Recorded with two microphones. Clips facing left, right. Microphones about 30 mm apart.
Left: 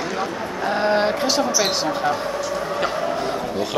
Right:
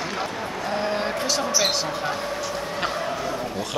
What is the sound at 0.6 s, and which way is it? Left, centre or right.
Speech, left.